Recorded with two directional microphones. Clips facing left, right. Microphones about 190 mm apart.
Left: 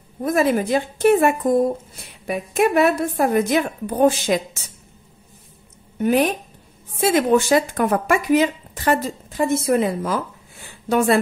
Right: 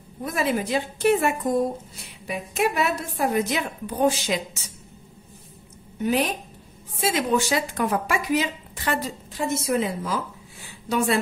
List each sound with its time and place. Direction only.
0.2 s a woman's voice: 45° left (ahead or behind)
5.9 s a woman's voice: 55° left (ahead or behind)